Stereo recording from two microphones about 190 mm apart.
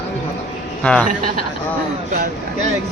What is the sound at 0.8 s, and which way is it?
Speech, 5° left (ahead or behind).